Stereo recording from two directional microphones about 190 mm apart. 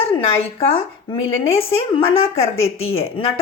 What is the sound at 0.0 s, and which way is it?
A woman's voice, 30° left (ahead or behind).